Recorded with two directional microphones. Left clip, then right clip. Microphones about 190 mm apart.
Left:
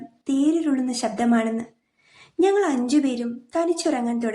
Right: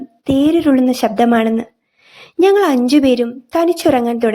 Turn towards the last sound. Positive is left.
turn(degrees=-50)  # may be behind; listen again after turning